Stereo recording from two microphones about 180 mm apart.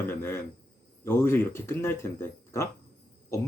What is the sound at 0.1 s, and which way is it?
Speech, 15° left (ahead or behind).